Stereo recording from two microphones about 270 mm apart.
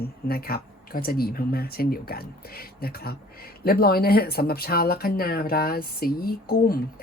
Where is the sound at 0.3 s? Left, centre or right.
Left.